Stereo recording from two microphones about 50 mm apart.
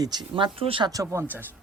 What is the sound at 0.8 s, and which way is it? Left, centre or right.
Speech, right.